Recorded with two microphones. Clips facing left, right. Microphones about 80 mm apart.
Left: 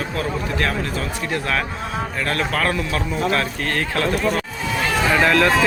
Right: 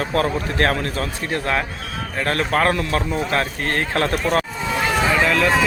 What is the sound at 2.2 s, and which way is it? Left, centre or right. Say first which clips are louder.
Speech: right 4 dB; right.